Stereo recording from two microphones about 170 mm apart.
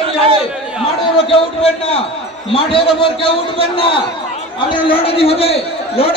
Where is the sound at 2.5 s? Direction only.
30° left (ahead or behind).